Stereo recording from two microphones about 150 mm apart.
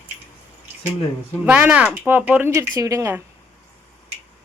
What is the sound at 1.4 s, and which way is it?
Speech, 10° right (ahead or behind).